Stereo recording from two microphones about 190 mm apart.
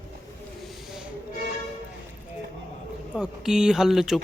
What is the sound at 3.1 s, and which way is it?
Speech, 5° right (ahead or behind).